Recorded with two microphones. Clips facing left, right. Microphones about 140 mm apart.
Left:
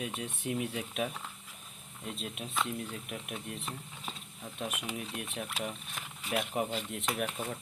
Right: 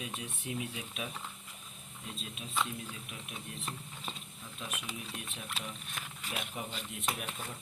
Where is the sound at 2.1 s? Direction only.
60° left (ahead or behind).